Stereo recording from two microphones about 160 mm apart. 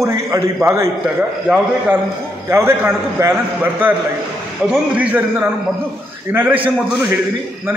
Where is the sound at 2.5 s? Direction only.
15° right (ahead or behind).